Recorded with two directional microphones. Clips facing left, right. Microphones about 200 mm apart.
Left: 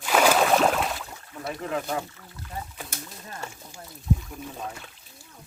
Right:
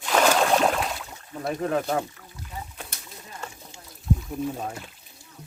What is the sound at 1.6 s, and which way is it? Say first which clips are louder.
Speech: right 4 dB; 40° right (ahead or behind).